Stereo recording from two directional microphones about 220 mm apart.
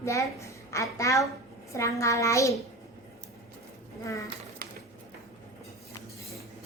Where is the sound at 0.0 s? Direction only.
15° left (ahead or behind).